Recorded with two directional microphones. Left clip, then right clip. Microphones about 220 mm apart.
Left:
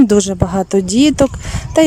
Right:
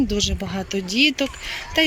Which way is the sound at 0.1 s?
35° left (ahead or behind).